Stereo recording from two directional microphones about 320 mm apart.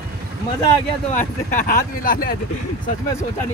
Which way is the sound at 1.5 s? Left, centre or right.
Left.